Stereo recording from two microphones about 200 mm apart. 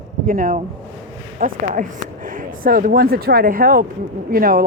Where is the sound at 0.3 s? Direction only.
45° right (ahead or behind).